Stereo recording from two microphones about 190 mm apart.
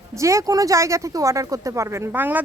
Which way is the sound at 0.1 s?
15° right (ahead or behind).